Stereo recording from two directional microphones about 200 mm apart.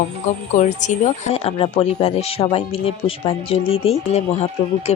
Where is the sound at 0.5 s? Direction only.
40° left (ahead or behind).